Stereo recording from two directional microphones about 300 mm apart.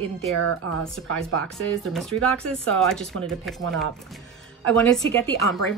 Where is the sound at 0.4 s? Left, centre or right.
Right.